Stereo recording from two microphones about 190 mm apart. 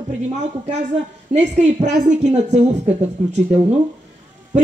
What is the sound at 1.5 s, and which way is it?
Speech, 40° right (ahead or behind).